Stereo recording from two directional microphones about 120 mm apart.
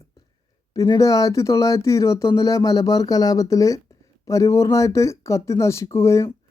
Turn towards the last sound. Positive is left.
turn(degrees=25)  # may be behind; listen again after turning